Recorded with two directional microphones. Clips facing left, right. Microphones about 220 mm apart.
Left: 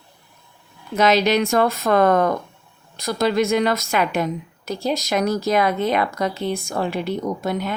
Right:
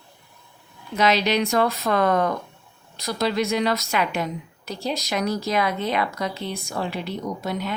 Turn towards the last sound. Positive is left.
turn(degrees=50)  # may be behind; listen again after turning